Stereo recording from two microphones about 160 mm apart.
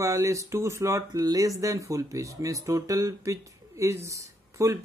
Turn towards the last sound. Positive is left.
turn(degrees=-20)  # may be behind; listen again after turning